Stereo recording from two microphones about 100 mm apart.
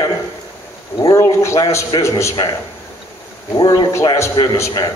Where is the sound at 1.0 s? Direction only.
30° left (ahead or behind).